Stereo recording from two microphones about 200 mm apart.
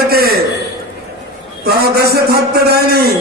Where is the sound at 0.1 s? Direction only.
50° right (ahead or behind).